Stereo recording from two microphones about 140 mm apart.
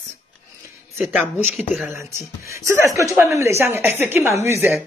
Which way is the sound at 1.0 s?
15° right (ahead or behind).